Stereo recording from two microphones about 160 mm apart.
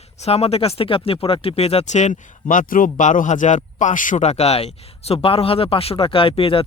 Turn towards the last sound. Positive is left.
turn(degrees=35)  # may be behind; listen again after turning